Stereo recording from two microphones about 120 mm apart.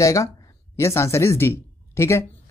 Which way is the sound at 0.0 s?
25° left (ahead or behind).